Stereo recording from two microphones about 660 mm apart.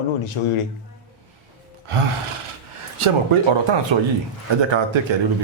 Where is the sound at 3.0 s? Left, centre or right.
Right.